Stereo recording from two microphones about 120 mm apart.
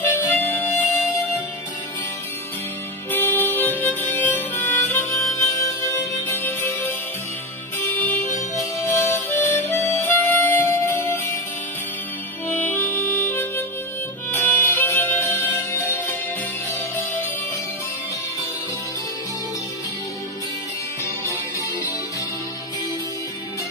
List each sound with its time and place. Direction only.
0.0 s harmonica: 20° left (ahead or behind)
3.1 s music: 15° left (ahead or behind)
12.4 s music: 15° left (ahead or behind)